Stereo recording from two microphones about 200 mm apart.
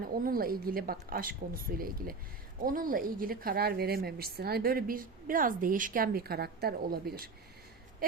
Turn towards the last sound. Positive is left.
turn(degrees=-50)  # may be behind; listen again after turning